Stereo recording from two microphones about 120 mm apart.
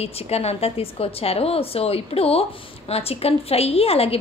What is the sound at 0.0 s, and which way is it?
A woman's voice, 60° left (ahead or behind).